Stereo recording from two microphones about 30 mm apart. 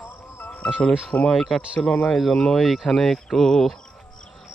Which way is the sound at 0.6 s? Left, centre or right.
Left.